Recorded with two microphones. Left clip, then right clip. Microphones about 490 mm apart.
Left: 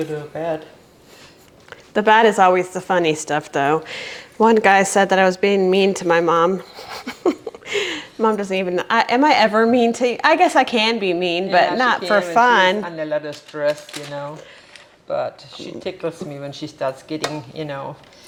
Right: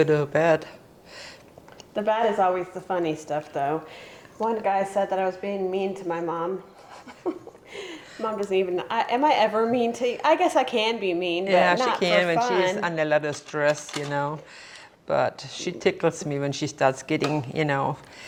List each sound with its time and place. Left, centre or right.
0.1 s speech: right
1.9 s a woman's voice: left
6.9 s a sound: left
8.4 s a woman's voice: left
12.8 s speech: right